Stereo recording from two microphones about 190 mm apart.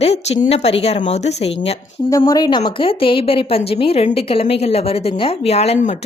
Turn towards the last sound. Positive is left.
turn(degrees=35)  # may be behind; listen again after turning